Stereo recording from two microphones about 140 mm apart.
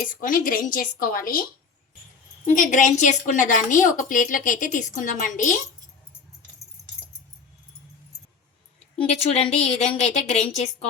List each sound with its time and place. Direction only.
0.0 s a woman's voice: 80° left
2.6 s a woman's voice: 60° left (ahead or behind)
9.0 s speech: 45° left (ahead or behind)